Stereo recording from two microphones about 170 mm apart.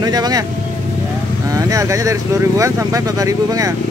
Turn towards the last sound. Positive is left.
turn(degrees=-20)  # may be behind; listen again after turning